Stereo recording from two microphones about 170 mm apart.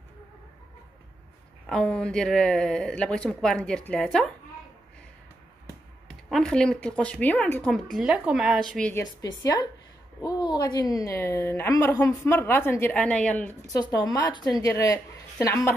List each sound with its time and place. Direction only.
1.7 s speech: 5° left (ahead or behind)
6.0 s speech: centre (ahead or behind)
7.7 s speech: centre (ahead or behind)
8.9 s a woman's voice: 20° left (ahead or behind)